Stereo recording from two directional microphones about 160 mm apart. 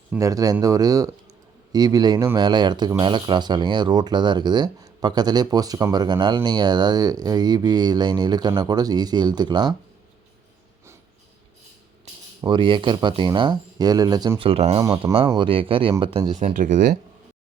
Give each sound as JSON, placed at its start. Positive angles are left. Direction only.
{"t": 0.2, "sound": "speech", "side_deg": -20}
{"t": 12.4, "sound": "speech", "side_deg": -30}
{"t": 14.8, "sound": "speech", "side_deg": -20}
{"t": 15.4, "sound": "speech", "side_deg": -35}